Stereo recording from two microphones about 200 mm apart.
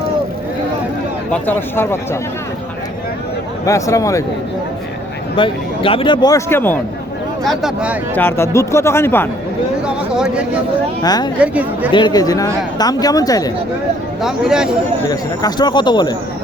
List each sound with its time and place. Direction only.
1.3 s speech: 10° left (ahead or behind)
3.7 s speech: 15° left (ahead or behind)
5.4 s speech: 25° left (ahead or behind); by 6.7 s 10° left (ahead or behind)
7.5 s speech: 5° right (ahead or behind)
8.1 s speech: 10° left (ahead or behind)
9.8 s speech: 5° right (ahead or behind)
11.0 s speech: 20° left (ahead or behind)
11.3 s speech: 5° right (ahead or behind)
11.9 s speech: 20° left (ahead or behind)
14.2 s speech: centre (ahead or behind)
15.1 s speech: 20° left (ahead or behind)